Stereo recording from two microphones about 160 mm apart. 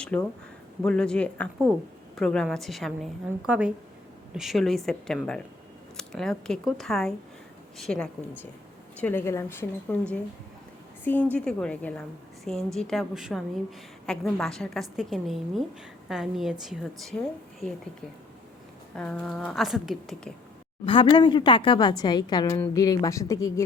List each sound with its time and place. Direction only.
0.1 s a woman's voice: 5° left (ahead or behind)
18.9 s a woman's voice: 5° left (ahead or behind)
20.8 s a woman's voice: 30° left (ahead or behind)